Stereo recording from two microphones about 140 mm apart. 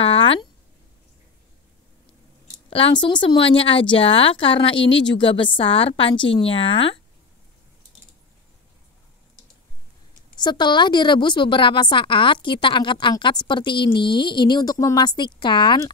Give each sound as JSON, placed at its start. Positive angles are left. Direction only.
{"t": 0.0, "sound": "a sound", "side_deg": 40}
{"t": 2.7, "sound": "a woman's voice", "side_deg": 40}
{"t": 10.4, "sound": "a woman's voice", "side_deg": 30}